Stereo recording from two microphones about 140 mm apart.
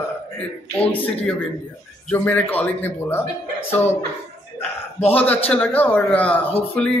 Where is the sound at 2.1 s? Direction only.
10° left (ahead or behind).